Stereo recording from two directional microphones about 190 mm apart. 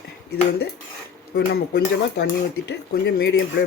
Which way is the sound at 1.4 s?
55° left (ahead or behind).